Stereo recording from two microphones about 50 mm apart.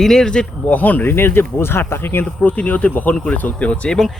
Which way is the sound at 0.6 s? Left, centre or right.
Left.